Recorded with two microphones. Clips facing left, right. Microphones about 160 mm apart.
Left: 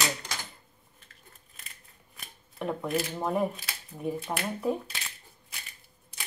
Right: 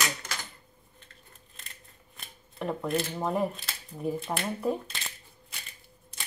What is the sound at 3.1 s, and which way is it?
Speech, centre (ahead or behind).